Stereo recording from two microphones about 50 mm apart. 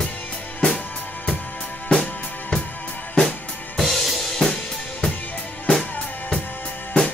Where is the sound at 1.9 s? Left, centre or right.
Centre.